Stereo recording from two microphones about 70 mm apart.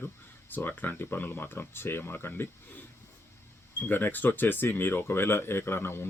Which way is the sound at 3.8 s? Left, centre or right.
Left.